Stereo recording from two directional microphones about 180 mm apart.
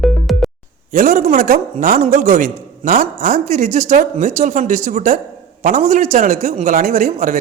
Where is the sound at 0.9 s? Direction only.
45° right (ahead or behind).